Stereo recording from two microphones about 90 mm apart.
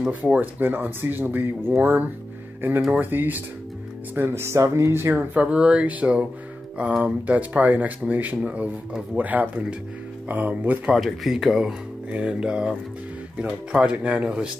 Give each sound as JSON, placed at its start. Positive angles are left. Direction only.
{"t": 0.1, "sound": "speech", "side_deg": -20}
{"t": 5.3, "sound": "speech", "side_deg": -15}
{"t": 10.9, "sound": "speech", "side_deg": -5}